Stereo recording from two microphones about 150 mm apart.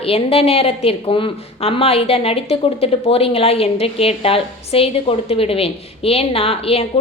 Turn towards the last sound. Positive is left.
turn(degrees=40)  # may be behind; listen again after turning